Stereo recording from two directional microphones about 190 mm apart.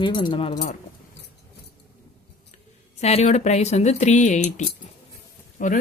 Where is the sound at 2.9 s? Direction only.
35° left (ahead or behind).